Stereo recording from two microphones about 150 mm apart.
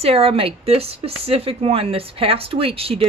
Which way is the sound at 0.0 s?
40° right (ahead or behind).